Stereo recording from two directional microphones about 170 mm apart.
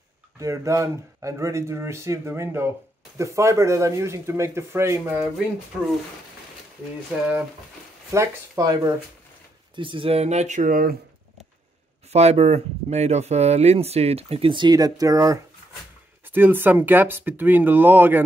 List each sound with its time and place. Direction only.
0.4 s speech: 15° right (ahead or behind)
8.1 s speech: 20° right (ahead or behind)
9.8 s speech: 30° right (ahead or behind); by 11.0 s 55° right (ahead or behind)
12.1 s speech: 40° right (ahead or behind); by 18.2 s 10° right (ahead or behind)